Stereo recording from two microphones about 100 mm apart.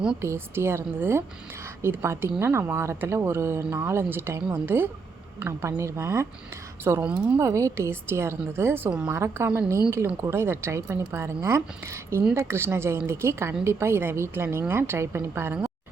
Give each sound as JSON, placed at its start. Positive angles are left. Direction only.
{"t": 0.2, "sound": "speech", "side_deg": -25}
{"t": 7.0, "sound": "speech", "side_deg": -10}
{"t": 7.3, "sound": "speech", "side_deg": -30}